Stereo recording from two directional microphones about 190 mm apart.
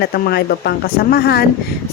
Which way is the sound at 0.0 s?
60° left (ahead or behind).